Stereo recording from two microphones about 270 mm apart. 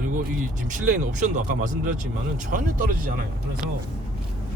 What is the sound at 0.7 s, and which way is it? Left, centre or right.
Speech, right.